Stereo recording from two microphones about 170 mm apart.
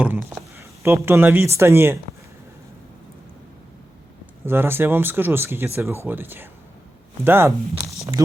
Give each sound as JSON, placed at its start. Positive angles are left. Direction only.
{"t": 0.6, "sound": "a sound", "side_deg": -15}
{"t": 1.0, "sound": "speech", "side_deg": -10}
{"t": 4.4, "sound": "speech", "side_deg": -15}